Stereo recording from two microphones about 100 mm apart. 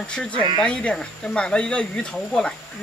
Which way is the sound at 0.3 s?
60° right (ahead or behind).